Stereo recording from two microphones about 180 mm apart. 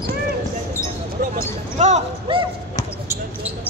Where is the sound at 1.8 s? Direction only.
35° right (ahead or behind).